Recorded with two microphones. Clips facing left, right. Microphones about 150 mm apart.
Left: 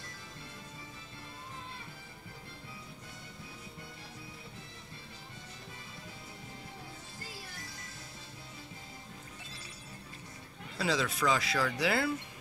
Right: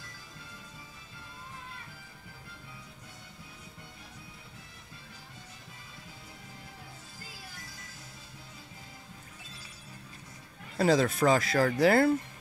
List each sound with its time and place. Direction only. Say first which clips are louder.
10.8 s speech: right 7 dB; 50° right (ahead or behind)